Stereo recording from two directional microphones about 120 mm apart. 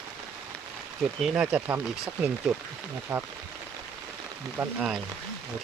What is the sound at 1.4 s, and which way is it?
Speech, 10° right (ahead or behind).